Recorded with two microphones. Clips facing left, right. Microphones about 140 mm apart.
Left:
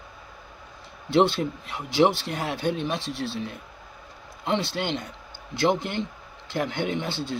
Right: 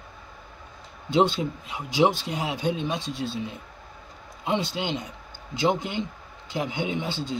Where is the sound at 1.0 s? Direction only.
15° right (ahead or behind).